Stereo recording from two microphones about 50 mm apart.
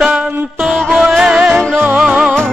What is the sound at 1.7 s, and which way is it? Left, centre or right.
Music, right.